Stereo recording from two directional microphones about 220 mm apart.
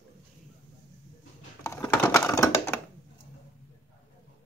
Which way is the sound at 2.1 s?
15° left (ahead or behind).